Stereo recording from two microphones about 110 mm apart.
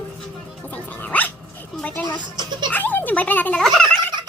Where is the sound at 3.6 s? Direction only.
Centre (ahead or behind).